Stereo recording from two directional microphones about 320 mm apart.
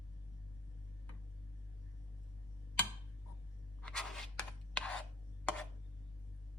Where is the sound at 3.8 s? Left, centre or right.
Centre.